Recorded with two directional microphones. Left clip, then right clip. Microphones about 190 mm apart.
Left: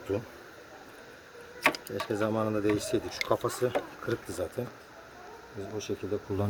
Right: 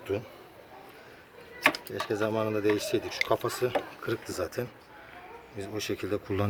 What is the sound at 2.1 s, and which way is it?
Speech, 50° left (ahead or behind).